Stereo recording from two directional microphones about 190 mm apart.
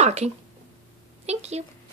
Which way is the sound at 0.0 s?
35° right (ahead or behind).